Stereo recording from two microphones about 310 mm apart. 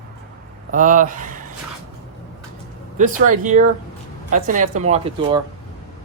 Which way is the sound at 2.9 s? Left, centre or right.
Right.